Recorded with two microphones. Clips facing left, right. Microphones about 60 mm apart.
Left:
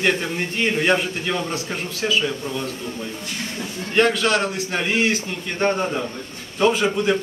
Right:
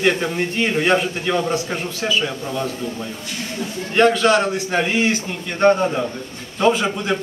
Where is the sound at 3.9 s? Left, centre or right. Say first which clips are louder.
Right 4 dB; centre.